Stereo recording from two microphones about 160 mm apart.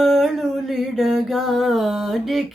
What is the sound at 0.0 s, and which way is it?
Music, centre (ahead or behind).